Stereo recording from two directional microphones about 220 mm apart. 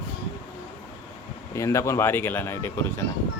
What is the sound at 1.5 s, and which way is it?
Speech, 15° left (ahead or behind).